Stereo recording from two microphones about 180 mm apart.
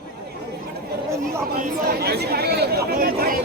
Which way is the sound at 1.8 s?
60° right (ahead or behind).